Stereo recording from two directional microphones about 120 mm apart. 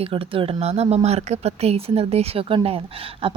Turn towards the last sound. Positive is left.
turn(degrees=-55)  # may be behind; listen again after turning